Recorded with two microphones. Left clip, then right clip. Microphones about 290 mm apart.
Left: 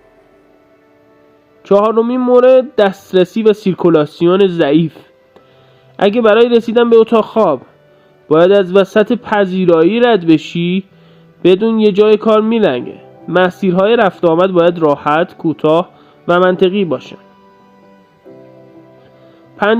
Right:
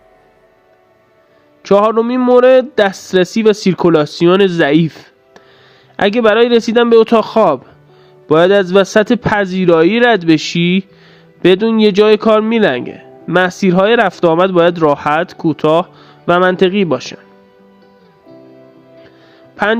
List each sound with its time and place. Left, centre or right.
1.6 s speech: right